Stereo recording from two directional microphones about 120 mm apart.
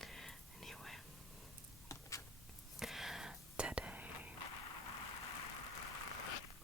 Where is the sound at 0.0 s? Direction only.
5° left (ahead or behind).